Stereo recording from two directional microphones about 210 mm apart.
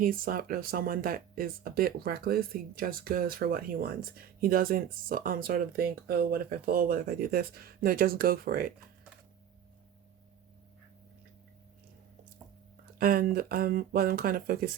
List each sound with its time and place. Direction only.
0.0 s speech: 45° right (ahead or behind)
13.0 s speech: 45° right (ahead or behind)